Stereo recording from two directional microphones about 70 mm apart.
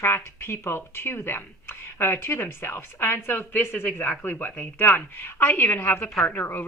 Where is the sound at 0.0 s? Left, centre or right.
Left.